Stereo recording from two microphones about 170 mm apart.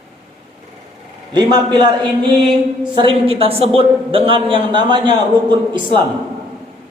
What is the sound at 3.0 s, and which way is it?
A man's voice, 35° right (ahead or behind).